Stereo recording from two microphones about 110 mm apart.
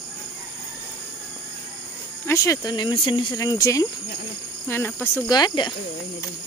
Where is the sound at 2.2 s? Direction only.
25° left (ahead or behind).